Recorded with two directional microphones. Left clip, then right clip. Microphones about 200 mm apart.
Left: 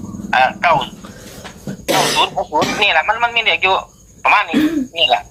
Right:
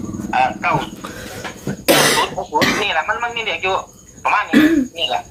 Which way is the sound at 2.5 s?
35° left (ahead or behind).